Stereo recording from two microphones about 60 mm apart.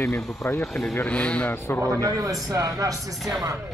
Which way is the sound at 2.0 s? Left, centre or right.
Right.